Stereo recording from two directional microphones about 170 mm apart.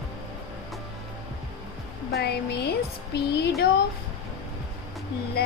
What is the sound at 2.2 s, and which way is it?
Speech, 70° left (ahead or behind).